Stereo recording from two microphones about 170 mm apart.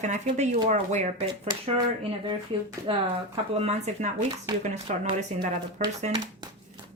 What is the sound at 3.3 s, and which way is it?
Speech, 35° right (ahead or behind).